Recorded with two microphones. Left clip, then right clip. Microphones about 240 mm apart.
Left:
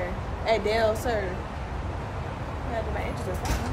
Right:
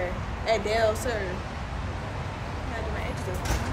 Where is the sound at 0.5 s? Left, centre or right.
Left.